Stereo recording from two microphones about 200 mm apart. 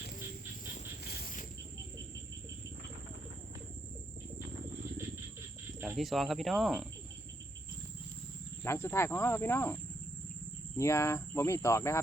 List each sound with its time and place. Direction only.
1.0 s a sound: 50° left (ahead or behind)
5.8 s speech: 5° right (ahead or behind)
8.6 s cricket: 15° left (ahead or behind)
10.8 s cricket: 15° left (ahead or behind)